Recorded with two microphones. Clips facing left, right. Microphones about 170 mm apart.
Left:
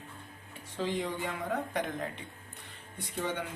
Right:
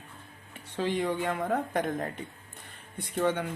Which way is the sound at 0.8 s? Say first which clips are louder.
Right 4 dB; 60° right (ahead or behind).